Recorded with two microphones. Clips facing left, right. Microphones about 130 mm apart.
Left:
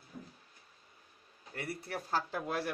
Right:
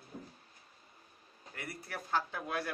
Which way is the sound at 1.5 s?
30° left (ahead or behind).